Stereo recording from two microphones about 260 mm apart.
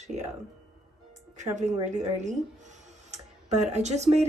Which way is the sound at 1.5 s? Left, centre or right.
Right.